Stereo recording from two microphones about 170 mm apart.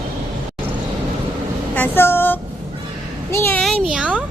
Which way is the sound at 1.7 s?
10° left (ahead or behind).